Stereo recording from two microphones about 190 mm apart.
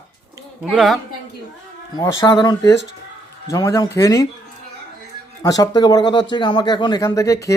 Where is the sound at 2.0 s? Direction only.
20° left (ahead or behind).